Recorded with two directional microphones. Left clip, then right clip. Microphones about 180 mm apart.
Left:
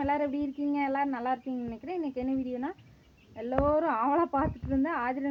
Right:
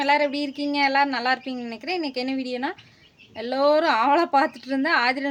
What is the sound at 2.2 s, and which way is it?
Speech, 30° right (ahead or behind).